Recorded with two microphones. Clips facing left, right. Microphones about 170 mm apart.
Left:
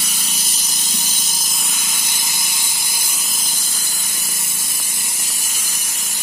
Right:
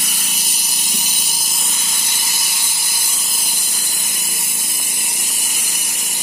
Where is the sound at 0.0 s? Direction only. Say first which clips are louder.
Even; 15° right (ahead or behind).